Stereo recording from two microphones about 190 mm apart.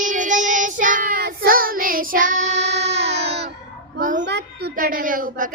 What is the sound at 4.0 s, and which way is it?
Child singing, 45° right (ahead or behind).